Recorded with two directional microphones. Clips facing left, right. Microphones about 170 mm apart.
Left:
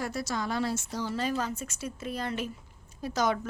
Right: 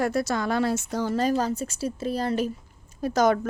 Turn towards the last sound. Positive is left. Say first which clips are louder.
# right 7 dB
turn(degrees=-50)  # may be behind; listen again after turning